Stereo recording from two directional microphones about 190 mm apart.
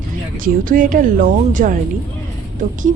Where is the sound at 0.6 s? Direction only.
45° right (ahead or behind).